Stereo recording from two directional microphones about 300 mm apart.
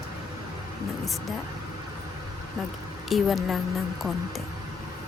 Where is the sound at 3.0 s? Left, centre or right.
Centre.